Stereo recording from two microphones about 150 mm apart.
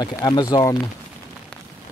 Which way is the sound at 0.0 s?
25° left (ahead or behind).